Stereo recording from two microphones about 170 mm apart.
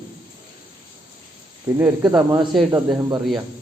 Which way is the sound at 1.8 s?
10° right (ahead or behind).